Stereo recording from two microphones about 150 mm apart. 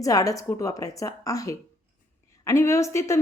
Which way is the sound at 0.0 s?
25° left (ahead or behind).